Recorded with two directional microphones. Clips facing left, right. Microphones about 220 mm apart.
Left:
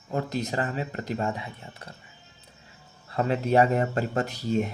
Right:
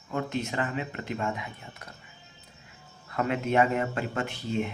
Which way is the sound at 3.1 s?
30° left (ahead or behind).